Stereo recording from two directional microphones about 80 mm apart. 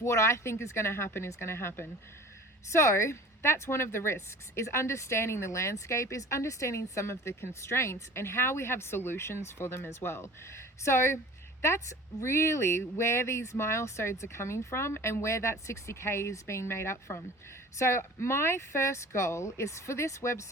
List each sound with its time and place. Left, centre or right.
0.0 s a woman's voice: left